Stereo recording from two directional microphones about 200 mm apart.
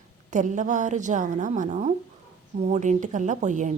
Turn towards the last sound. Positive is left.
turn(degrees=-35)  # may be behind; listen again after turning